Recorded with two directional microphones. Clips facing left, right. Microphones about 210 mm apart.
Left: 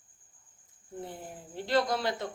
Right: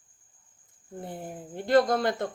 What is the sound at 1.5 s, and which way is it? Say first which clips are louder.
Speech: right 6 dB; 50° right (ahead or behind).